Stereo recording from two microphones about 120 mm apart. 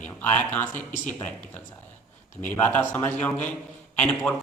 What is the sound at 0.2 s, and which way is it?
Speech, 15° left (ahead or behind).